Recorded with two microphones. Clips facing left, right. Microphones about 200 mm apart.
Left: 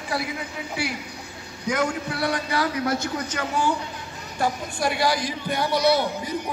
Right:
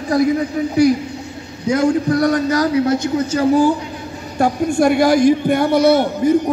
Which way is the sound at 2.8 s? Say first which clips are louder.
Right 9 dB; 20° right (ahead or behind).